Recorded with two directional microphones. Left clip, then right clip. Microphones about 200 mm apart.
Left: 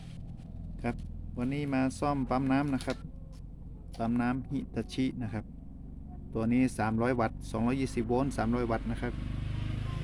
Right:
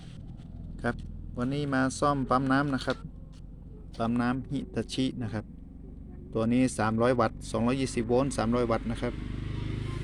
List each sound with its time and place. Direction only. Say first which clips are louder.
1.4 s speech: right 3 dB; 5° right (ahead or behind)